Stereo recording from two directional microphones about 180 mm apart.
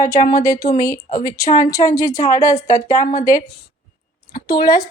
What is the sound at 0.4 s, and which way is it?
A woman's voice, 15° left (ahead or behind).